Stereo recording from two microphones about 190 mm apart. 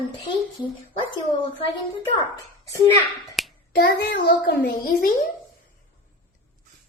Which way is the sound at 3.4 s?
Centre (ahead or behind).